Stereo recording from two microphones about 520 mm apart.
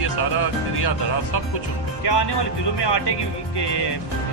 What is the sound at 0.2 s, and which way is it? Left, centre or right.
Speech, left.